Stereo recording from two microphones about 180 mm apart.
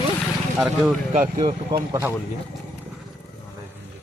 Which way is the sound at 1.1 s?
40° right (ahead or behind).